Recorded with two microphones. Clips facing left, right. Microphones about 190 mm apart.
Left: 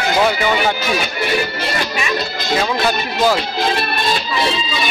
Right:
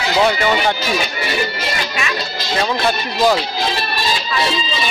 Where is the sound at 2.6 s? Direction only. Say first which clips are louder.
Right 2 dB; centre (ahead or behind).